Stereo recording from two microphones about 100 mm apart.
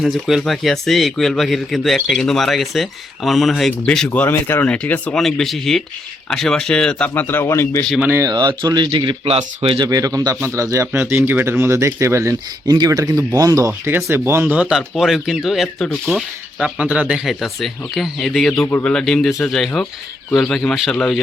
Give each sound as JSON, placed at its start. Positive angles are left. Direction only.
{"t": 0.0, "sound": "a man's voice", "side_deg": 0}
{"t": 3.5, "sound": "a man's voice", "side_deg": 10}
{"t": 7.1, "sound": "a man's voice", "side_deg": 20}
{"t": 8.0, "sound": "speech", "side_deg": -25}
{"t": 8.3, "sound": "speech", "side_deg": -45}
{"t": 9.8, "sound": "speech", "side_deg": -35}
{"t": 12.6, "sound": "speech", "side_deg": -45}
{"t": 14.4, "sound": "a man's voice", "side_deg": -15}